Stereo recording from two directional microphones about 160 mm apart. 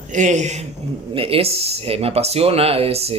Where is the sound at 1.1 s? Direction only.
35° right (ahead or behind).